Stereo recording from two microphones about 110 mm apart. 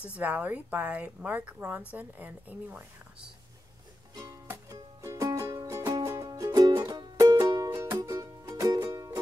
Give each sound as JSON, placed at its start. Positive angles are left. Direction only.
{"t": 0.1, "sound": "speech", "side_deg": -15}
{"t": 4.1, "sound": "music", "side_deg": -30}